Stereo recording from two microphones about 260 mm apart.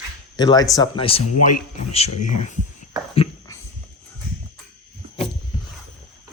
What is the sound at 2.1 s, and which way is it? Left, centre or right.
Speech, left.